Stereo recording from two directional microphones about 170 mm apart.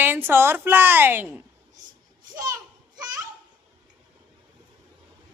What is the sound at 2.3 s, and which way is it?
Children playing, 20° right (ahead or behind).